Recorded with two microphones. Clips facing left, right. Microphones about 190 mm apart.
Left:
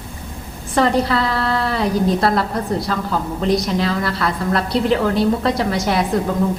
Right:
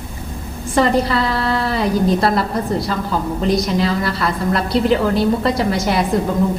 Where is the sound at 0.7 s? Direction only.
Centre (ahead or behind).